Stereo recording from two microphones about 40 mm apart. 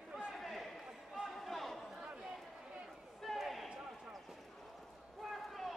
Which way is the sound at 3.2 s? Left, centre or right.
Centre.